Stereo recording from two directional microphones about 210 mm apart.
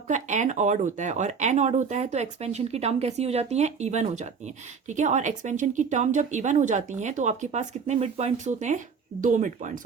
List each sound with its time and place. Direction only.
0.1 s speech: 35° right (ahead or behind)